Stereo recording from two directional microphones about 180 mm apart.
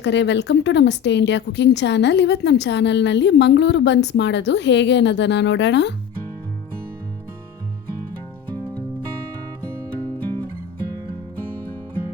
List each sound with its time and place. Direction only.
0.0 s speech: 75° left (ahead or behind)